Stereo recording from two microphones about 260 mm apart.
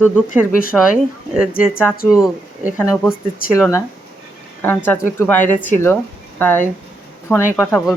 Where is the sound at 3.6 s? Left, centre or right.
Centre.